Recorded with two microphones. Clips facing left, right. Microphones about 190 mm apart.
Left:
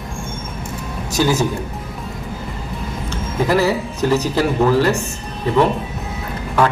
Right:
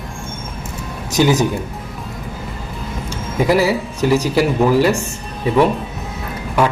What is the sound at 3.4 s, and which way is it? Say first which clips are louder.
Speech: right 1 dB; 10° right (ahead or behind).